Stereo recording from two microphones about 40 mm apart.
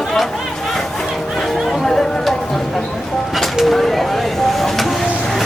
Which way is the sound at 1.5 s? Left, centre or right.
Centre.